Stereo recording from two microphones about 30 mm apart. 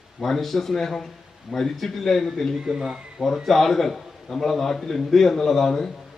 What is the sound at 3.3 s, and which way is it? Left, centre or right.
Speech, centre.